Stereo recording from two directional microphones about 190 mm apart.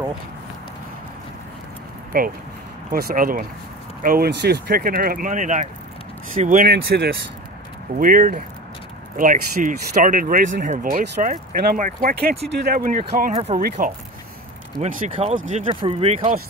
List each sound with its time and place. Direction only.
2.9 s speech: 50° right (ahead or behind)
6.7 s speech: 60° right (ahead or behind)
8.0 s speech: 45° right (ahead or behind)
13.6 s speech: 45° right (ahead or behind)